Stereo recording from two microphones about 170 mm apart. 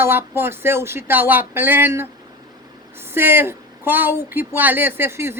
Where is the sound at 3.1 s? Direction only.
15° right (ahead or behind).